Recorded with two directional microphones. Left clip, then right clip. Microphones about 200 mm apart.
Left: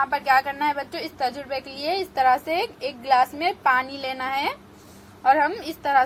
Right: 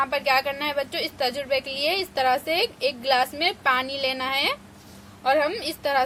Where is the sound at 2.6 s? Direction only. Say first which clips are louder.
Right 3 dB; 20° left (ahead or behind).